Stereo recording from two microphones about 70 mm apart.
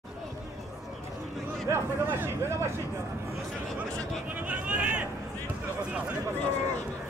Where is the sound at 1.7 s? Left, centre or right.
Right.